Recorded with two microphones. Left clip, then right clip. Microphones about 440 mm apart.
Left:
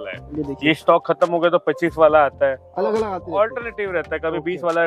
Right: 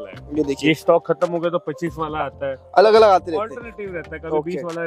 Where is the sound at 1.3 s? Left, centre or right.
Left.